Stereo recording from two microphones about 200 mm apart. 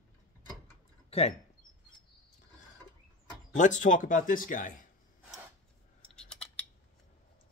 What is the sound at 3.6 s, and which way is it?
Speech, 40° left (ahead or behind).